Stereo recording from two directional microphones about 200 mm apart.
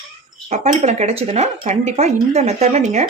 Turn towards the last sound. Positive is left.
turn(degrees=-35)  # may be behind; listen again after turning